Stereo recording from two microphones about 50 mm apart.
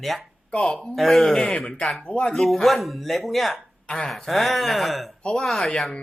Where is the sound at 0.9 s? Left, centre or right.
Centre.